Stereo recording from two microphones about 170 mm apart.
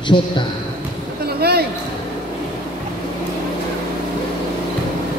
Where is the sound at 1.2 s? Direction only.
70° right (ahead or behind).